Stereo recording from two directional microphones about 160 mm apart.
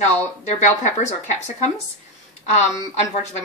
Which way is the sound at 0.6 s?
45° left (ahead or behind).